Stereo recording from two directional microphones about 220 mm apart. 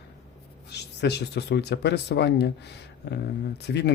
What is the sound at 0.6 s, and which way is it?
Speech, 50° left (ahead or behind).